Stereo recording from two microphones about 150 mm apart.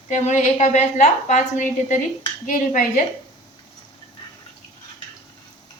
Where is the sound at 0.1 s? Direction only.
55° left (ahead or behind).